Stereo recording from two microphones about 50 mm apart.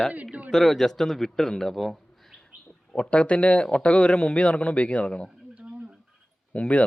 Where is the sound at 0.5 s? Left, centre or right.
Centre.